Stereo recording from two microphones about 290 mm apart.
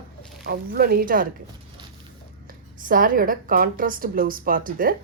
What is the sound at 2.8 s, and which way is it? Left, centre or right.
Speech, right.